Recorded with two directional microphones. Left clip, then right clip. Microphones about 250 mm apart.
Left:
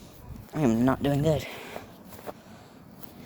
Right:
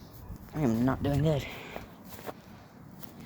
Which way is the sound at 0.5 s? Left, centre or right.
Left.